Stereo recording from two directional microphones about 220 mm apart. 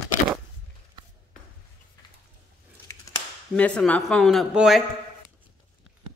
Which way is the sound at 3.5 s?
5° left (ahead or behind).